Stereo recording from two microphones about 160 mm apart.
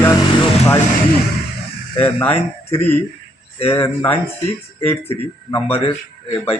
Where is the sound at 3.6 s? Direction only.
15° left (ahead or behind).